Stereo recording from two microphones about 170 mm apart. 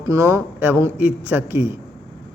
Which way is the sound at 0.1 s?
15° right (ahead or behind).